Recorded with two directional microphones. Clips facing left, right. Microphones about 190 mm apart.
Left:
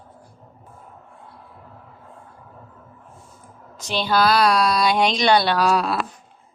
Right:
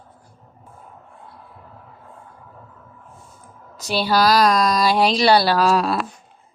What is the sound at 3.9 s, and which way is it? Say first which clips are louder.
Speech: right 2 dB; 10° right (ahead or behind).